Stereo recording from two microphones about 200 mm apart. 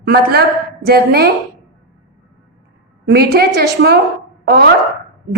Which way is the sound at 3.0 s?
55° right (ahead or behind).